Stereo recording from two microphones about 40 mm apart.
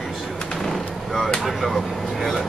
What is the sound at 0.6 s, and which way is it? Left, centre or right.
Vehicle, centre.